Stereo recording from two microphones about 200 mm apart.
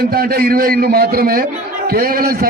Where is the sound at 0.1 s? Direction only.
50° right (ahead or behind).